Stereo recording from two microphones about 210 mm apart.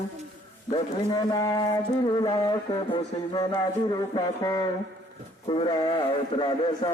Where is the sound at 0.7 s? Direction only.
25° left (ahead or behind).